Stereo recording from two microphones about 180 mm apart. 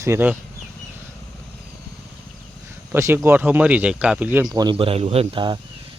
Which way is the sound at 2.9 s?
15° right (ahead or behind).